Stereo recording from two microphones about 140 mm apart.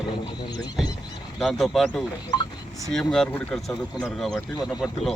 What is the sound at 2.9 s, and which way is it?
Speech, 5° left (ahead or behind).